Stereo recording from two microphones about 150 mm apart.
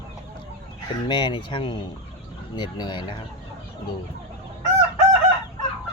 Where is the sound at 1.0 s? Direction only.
30° left (ahead or behind).